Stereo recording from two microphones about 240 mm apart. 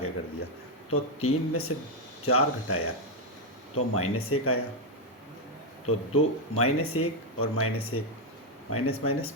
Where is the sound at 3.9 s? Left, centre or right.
Left.